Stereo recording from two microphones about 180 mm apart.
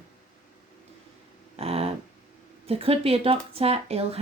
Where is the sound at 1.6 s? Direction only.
35° right (ahead or behind).